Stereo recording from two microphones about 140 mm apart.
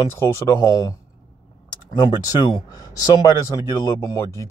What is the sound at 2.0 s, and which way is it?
Speech, 30° left (ahead or behind).